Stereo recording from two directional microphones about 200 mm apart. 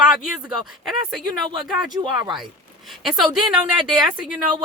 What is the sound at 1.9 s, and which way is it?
Speech, 20° right (ahead or behind).